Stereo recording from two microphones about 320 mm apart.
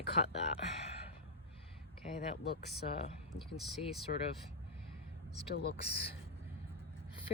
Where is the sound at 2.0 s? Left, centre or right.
Left.